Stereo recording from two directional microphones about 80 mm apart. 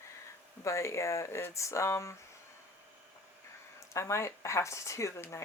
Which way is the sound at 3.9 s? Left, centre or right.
Left.